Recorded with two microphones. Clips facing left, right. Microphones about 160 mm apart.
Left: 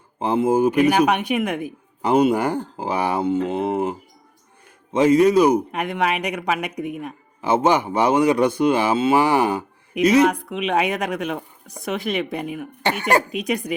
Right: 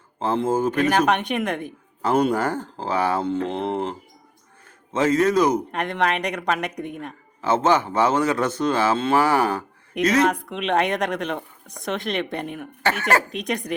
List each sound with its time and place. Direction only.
0.2 s speech: 15° left (ahead or behind)
12.8 s speech: 15° left (ahead or behind)
13.3 s speech: 5° left (ahead or behind)